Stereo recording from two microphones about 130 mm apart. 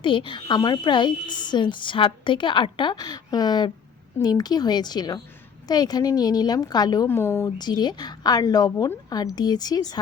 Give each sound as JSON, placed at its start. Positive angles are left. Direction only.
{"t": 0.0, "sound": "a woman's voice", "side_deg": 40}
{"t": 7.2, "sound": "speech", "side_deg": 20}
{"t": 7.6, "sound": "a woman's voice", "side_deg": 35}